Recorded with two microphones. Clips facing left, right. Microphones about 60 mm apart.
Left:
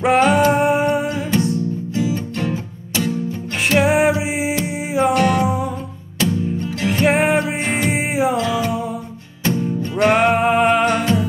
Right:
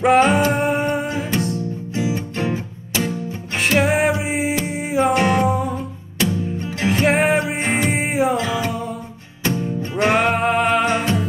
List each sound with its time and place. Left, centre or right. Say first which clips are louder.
0.0 s music: even; centre
2.0 s music: even; right
3.6 s music: left 2 dB; centre
6.9 s music: left 1 dB; centre
10.0 s music: left 3 dB; centre
10.9 s music: left 2 dB; centre